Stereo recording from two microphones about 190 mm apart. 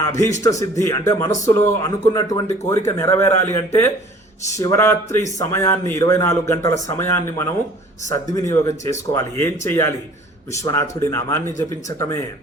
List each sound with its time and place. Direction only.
0.4 s speech: 15° left (ahead or behind)